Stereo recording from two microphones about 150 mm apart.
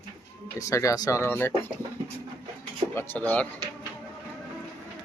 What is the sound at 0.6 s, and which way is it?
Speech, 20° left (ahead or behind).